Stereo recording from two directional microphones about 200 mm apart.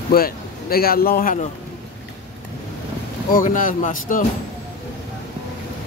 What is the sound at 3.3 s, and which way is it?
Speech, 40° left (ahead or behind).